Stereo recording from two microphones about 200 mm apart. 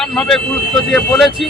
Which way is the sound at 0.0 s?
Centre (ahead or behind).